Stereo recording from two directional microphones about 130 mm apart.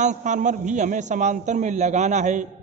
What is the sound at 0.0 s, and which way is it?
A man's voice, 70° right (ahead or behind).